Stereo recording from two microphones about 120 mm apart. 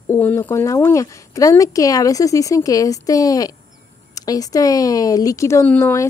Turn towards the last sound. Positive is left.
turn(degrees=20)  # may be behind; listen again after turning